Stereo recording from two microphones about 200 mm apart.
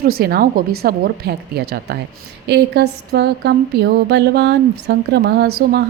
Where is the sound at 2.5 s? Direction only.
60° right (ahead or behind).